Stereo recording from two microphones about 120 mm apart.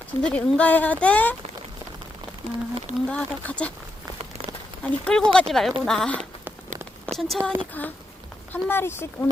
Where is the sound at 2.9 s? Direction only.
10° left (ahead or behind).